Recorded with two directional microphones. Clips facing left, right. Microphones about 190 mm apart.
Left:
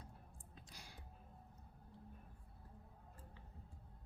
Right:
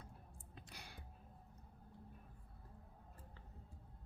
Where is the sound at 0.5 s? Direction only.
60° right (ahead or behind).